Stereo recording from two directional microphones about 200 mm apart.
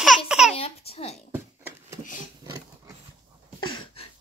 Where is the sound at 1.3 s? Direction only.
10° right (ahead or behind).